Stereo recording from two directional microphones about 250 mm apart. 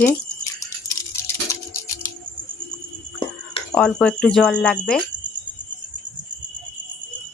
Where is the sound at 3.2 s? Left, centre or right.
Centre.